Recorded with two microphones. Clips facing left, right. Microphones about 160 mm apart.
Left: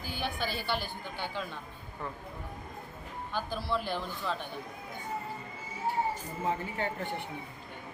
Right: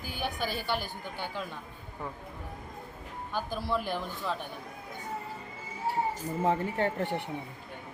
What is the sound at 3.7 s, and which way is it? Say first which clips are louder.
Speech: right 1 dB; 10° right (ahead or behind).